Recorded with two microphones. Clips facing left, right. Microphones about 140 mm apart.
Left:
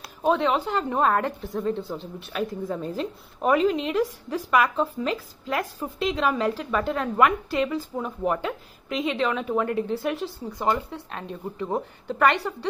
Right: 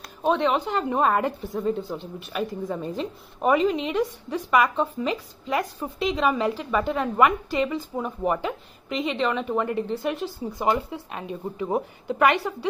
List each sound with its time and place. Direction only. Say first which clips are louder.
0.2 s a woman's voice: even; centre (ahead or behind)